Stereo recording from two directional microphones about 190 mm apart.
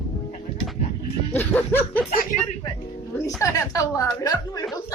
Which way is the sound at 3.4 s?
15° left (ahead or behind).